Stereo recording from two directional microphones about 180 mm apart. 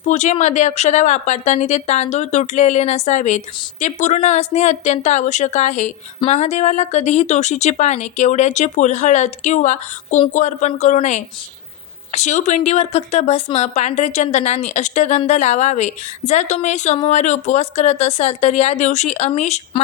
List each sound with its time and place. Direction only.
0.1 s a woman's voice: 40° left (ahead or behind)